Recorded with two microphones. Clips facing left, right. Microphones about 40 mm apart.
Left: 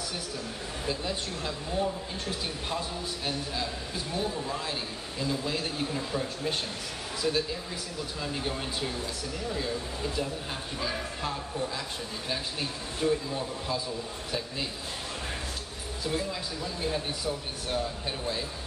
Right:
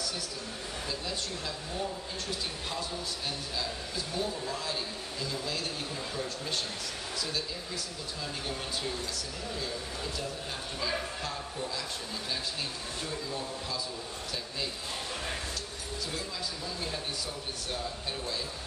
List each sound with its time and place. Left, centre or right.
0.8 s a man's voice: left
4.1 s a man's voice: centre
8.2 s a man's voice: centre
13.0 s a man's voice: centre